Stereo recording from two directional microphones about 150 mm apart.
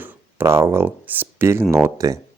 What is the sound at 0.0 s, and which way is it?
Speech, 15° right (ahead or behind).